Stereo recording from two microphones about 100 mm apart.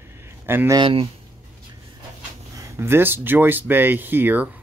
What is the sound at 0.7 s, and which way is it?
Speech, 60° right (ahead or behind).